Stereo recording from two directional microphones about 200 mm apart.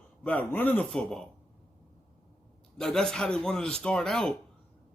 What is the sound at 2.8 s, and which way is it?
Speech, 5° left (ahead or behind).